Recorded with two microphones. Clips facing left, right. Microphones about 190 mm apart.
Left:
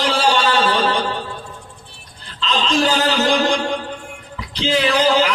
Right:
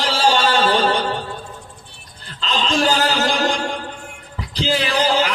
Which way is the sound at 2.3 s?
45° right (ahead or behind).